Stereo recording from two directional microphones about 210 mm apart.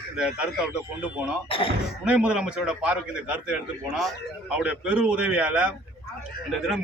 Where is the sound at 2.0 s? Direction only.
5° right (ahead or behind).